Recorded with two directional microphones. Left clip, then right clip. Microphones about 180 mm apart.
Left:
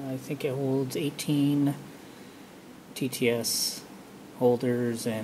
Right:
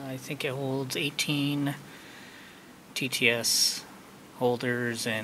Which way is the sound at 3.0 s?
10° left (ahead or behind).